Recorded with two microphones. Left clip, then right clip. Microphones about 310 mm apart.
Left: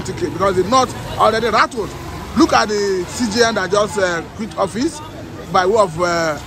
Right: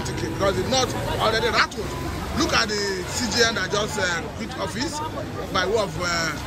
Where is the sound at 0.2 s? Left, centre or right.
Centre.